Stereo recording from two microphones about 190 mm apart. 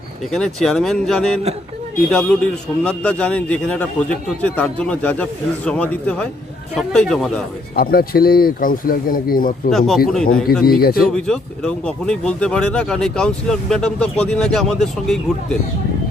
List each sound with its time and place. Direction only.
0.3 s a man's voice: 5° left (ahead or behind)
7.8 s speech: 55° left (ahead or behind)
9.7 s speech: centre (ahead or behind)
10.6 s speech: 55° left (ahead or behind)
11.1 s speech: 5° left (ahead or behind)